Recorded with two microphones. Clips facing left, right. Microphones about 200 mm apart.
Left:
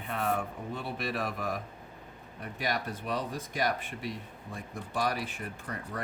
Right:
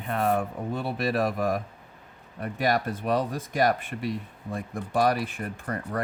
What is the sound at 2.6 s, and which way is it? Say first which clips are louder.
Speech: right 8 dB; 50° right (ahead or behind).